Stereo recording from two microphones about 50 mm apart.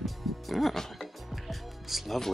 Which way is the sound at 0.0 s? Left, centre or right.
Centre.